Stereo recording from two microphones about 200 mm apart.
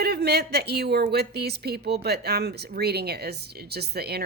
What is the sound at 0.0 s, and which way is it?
Speech, 55° right (ahead or behind).